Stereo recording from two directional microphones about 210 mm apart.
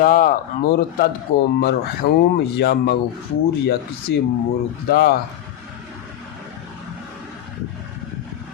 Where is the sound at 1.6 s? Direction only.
50° left (ahead or behind).